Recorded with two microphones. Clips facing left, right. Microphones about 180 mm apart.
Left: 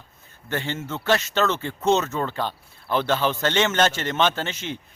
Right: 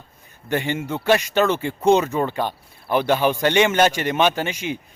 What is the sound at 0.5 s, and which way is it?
Speech, 15° right (ahead or behind).